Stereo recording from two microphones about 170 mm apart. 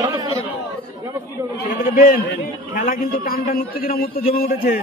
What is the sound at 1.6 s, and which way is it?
A man's voice, 55° left (ahead or behind).